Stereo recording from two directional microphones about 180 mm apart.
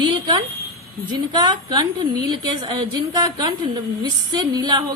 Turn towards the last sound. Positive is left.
turn(degrees=-20)  # may be behind; listen again after turning